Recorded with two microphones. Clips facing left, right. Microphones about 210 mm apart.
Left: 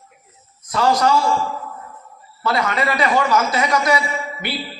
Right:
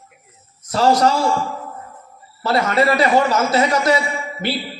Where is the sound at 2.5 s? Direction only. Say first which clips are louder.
Right 4 dB; 35° right (ahead or behind).